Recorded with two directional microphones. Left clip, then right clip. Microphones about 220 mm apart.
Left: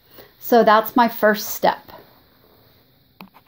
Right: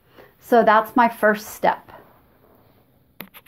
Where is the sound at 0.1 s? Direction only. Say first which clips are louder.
Left 1 dB; 40° left (ahead or behind).